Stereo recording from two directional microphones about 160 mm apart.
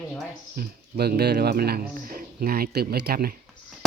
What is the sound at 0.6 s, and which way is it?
Speech, 80° right.